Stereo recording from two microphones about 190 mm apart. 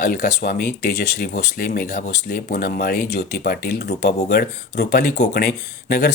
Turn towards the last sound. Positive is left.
turn(degrees=55)  # may be behind; listen again after turning